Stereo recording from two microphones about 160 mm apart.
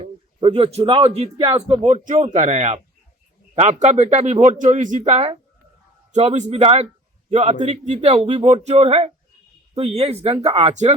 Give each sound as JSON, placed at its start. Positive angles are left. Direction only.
{"t": 0.0, "sound": "a man's voice", "side_deg": -35}
{"t": 1.8, "sound": "speech", "side_deg": -50}